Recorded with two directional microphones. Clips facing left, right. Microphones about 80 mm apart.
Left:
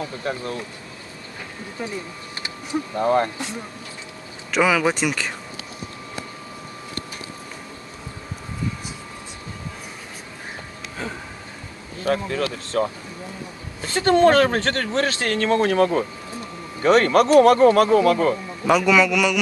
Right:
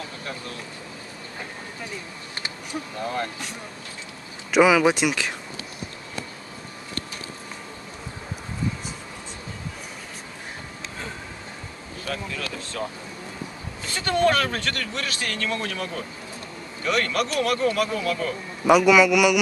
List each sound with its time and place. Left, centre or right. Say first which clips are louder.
0.2 s speech: left 8 dB; left
3.0 s speech: left 10 dB; left
4.5 s speech: right 2 dB; centre
12.0 s speech: left 9 dB; left
13.8 s speech: left 6 dB; left
18.7 s speech: right 1 dB; centre